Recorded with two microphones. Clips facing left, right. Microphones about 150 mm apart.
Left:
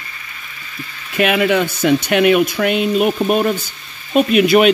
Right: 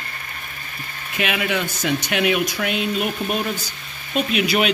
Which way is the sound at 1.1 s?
55° left (ahead or behind).